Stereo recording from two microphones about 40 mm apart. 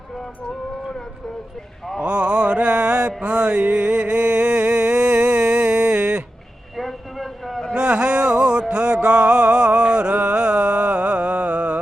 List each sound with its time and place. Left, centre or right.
2.0 s mantra: right
3.2 s a sound: right
6.7 s vehicle: centre
7.7 s music: right